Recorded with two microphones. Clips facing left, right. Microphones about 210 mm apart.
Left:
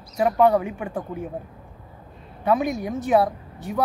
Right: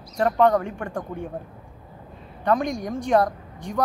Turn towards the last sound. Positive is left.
turn(degrees=5)  # may be behind; listen again after turning